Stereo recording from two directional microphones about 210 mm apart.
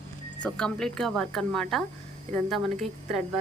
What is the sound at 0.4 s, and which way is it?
A woman's voice, 5° left (ahead or behind).